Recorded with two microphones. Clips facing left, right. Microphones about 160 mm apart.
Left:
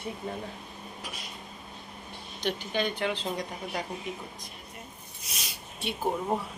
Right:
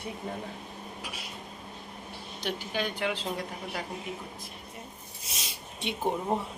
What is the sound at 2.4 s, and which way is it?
Speech, 5° right (ahead or behind).